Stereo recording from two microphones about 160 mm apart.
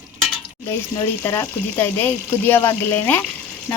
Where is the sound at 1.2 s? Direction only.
15° left (ahead or behind).